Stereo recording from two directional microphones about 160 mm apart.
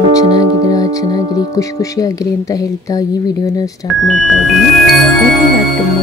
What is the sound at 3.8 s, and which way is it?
Speech, centre (ahead or behind).